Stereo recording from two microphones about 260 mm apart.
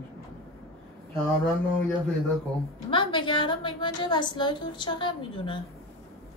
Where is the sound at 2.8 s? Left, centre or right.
Centre.